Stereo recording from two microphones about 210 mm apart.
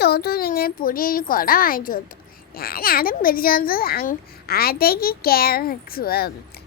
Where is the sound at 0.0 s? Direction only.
45° left (ahead or behind).